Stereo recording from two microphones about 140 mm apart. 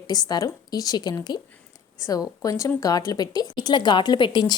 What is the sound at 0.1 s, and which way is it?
A woman's voice, 30° left (ahead or behind).